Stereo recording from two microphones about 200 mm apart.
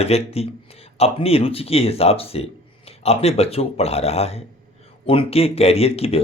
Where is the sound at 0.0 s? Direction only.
30° left (ahead or behind).